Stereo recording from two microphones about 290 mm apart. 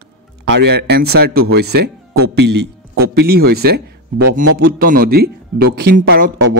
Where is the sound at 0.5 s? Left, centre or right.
Right.